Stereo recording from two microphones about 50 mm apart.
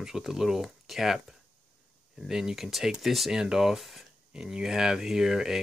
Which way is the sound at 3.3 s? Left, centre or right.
Centre.